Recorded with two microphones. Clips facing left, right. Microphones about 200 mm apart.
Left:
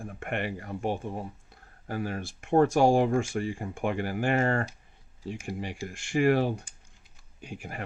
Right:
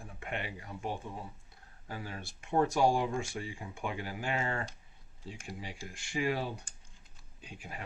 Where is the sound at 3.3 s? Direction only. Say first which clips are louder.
Left 9 dB; 50° left (ahead or behind).